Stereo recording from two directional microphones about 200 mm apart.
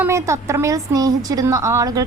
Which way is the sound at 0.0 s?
15° right (ahead or behind).